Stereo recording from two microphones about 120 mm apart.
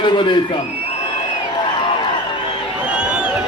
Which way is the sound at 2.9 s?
10° right (ahead or behind).